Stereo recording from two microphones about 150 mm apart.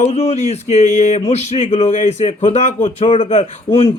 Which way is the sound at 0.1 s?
45° left (ahead or behind).